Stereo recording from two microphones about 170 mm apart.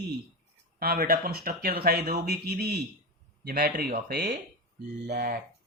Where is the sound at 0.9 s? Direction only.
55° right (ahead or behind).